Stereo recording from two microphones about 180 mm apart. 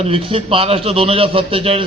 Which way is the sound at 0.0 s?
30° right (ahead or behind).